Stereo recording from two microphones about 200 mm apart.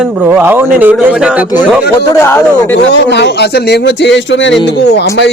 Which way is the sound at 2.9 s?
60° left (ahead or behind).